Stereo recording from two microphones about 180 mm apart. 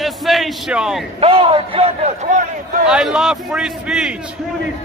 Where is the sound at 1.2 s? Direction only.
30° right (ahead or behind).